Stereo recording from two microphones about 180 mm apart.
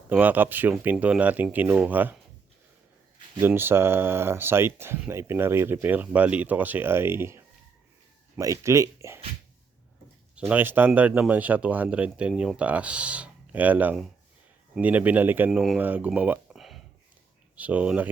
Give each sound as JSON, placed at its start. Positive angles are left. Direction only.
{"t": 0.1, "sound": "speech", "side_deg": -10}
{"t": 3.4, "sound": "speech", "side_deg": -10}
{"t": 10.3, "sound": "speech", "side_deg": -10}